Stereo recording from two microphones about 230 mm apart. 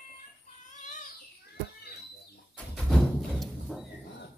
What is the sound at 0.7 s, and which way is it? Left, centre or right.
Chicken, left.